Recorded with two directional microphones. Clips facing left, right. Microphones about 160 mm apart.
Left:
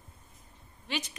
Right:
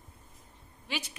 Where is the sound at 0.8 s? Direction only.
10° right (ahead or behind).